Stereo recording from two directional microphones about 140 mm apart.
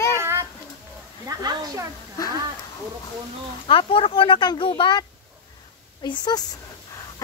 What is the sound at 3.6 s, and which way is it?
Speech, 40° left (ahead or behind).